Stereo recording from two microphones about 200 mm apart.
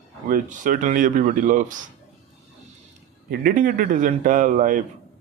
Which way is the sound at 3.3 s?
45° right (ahead or behind).